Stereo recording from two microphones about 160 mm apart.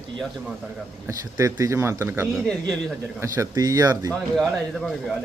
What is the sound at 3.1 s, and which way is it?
Speech, 15° right (ahead or behind).